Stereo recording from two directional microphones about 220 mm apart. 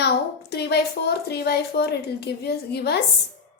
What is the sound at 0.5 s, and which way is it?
A woman's voice, 50° left (ahead or behind).